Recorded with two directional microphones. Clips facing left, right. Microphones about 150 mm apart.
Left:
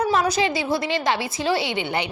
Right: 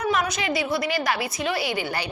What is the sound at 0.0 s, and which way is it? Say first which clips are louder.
A woman's voice: left 4 dB; 30° left (ahead or behind).